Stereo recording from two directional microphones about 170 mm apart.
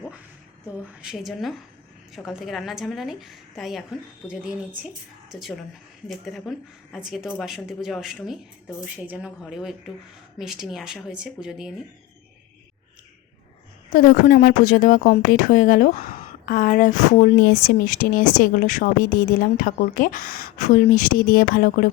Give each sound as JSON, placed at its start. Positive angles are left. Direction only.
{"t": 1.0, "sound": "a woman's voice", "side_deg": 0}
{"t": 13.9, "sound": "a woman's voice", "side_deg": 60}